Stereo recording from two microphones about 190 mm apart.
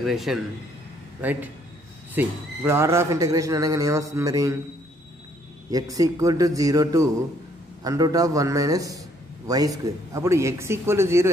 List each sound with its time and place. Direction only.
0.0 s speech: centre (ahead or behind); by 4.6 s 15° right (ahead or behind)
5.7 s speech: 20° right (ahead or behind)